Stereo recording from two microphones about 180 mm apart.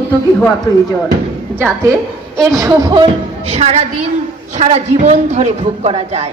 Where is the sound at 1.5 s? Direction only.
10° right (ahead or behind); by 6.3 s 35° right (ahead or behind).